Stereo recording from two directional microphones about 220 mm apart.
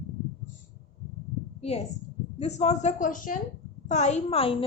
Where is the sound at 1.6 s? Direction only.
30° left (ahead or behind).